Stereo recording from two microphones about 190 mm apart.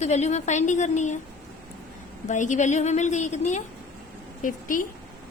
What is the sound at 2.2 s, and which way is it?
A woman's voice, 40° left (ahead or behind).